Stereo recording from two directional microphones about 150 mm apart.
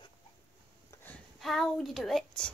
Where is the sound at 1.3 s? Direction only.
Centre (ahead or behind).